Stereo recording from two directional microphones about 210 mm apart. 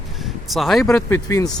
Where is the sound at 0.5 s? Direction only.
Centre (ahead or behind).